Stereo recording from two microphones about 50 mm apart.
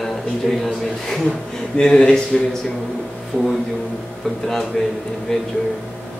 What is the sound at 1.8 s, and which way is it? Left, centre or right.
Speech, centre.